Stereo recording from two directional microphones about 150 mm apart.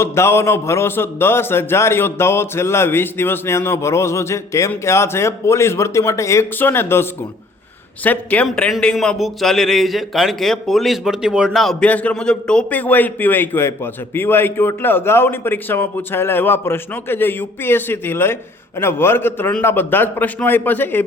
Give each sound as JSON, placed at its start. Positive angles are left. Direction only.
{"t": 0.0, "sound": "a man's voice", "side_deg": 15}